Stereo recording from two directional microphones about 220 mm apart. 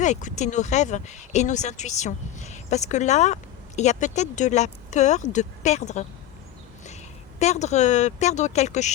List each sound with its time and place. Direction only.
0.0 s speech: 35° left (ahead or behind)